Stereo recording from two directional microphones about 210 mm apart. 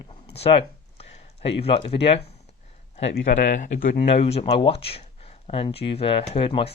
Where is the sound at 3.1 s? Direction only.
40° left (ahead or behind).